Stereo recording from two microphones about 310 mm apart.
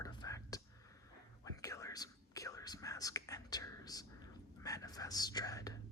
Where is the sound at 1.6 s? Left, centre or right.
Centre.